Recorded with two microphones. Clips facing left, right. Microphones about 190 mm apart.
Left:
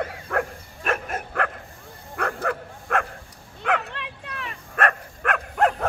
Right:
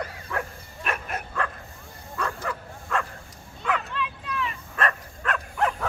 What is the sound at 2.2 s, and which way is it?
Bow-wow, 60° left (ahead or behind).